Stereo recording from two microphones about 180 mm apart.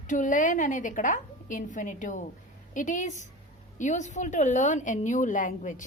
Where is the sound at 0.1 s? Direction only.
45° left (ahead or behind).